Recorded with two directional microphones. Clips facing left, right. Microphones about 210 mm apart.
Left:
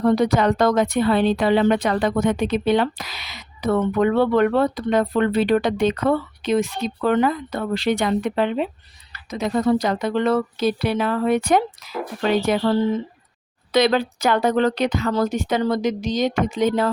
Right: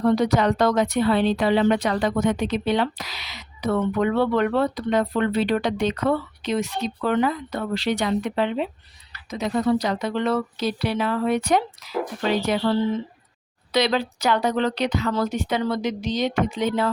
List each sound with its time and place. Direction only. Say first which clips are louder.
0.1 s speech: left 3 dB; 50° left (ahead or behind)
13.7 s speech: left 4 dB; 50° left (ahead or behind)